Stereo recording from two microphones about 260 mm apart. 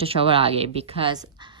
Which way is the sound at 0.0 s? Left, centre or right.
Right.